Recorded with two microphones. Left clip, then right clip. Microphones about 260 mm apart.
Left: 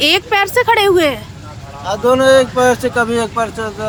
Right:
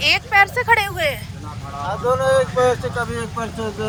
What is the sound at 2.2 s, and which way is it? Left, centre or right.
Speech, left.